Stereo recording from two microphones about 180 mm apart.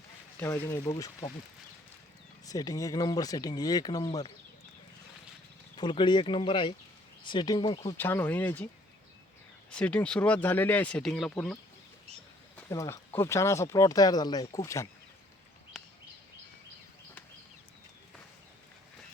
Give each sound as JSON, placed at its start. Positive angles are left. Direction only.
{"t": 0.3, "sound": "speech", "side_deg": 15}
{"t": 2.5, "sound": "speech", "side_deg": 20}
{"t": 5.7, "sound": "speech", "side_deg": 25}
{"t": 9.6, "sound": "speech", "side_deg": 5}
{"t": 12.5, "sound": "speech", "side_deg": 15}
{"t": 15.7, "sound": "a sound", "side_deg": 5}